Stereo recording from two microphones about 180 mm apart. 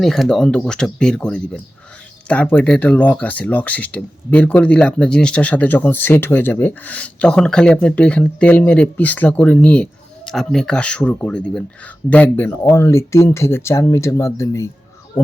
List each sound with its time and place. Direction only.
0.0 s speech: centre (ahead or behind)